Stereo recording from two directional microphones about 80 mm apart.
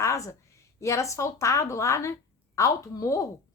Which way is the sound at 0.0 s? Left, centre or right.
Left.